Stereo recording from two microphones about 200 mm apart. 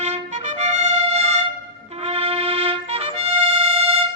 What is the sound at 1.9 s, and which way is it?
Music, 30° right (ahead or behind).